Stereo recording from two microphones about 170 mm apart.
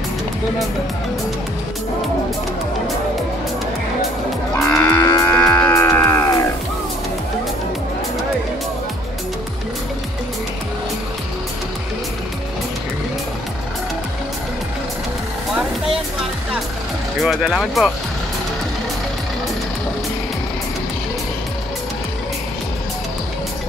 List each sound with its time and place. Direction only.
4.6 s livestock: 10° left (ahead or behind)
5.0 s livestock: 20° left (ahead or behind)
5.6 s music: 15° left (ahead or behind)
17.2 s speech: centre (ahead or behind)